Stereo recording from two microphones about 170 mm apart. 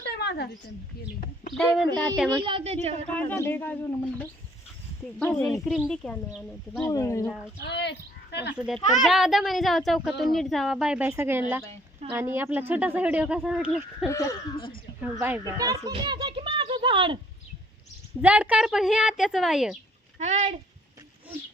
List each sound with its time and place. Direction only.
0.1 s a sound: 75° left (ahead or behind)
1.5 s a child's voice: centre (ahead or behind)
2.4 s a woman's voice: 30° right (ahead or behind)
3.1 s a child's voice: 10° left (ahead or behind)
6.8 s speech: 20° left (ahead or behind)
7.6 s speech: 80° left
8.5 s a child's voice: centre (ahead or behind)
11.7 s speech: 40° right (ahead or behind)
12.1 s a child's voice: 15° right (ahead or behind)
15.9 s a sound: 30° right (ahead or behind)
18.2 s a child's voice: 10° right (ahead or behind)
20.1 s speech: 45° right (ahead or behind)